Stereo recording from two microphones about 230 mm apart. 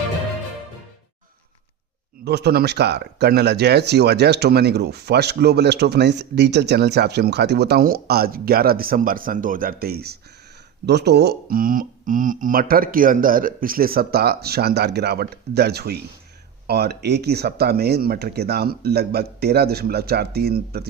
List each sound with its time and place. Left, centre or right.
2.2 s speech: right